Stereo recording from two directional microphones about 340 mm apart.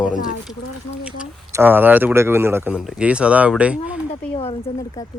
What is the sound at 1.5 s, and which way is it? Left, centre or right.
Speech, centre.